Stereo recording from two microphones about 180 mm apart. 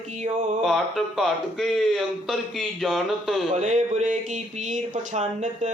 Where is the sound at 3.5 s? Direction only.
40° right (ahead or behind).